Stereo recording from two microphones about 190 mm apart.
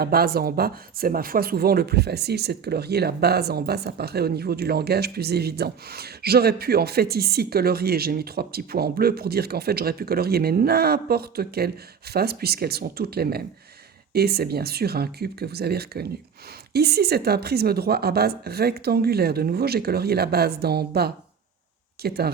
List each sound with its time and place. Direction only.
0.0 s speech: 55° right (ahead or behind)